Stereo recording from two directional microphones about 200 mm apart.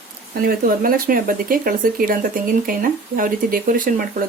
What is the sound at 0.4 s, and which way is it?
Speech, 45° right (ahead or behind).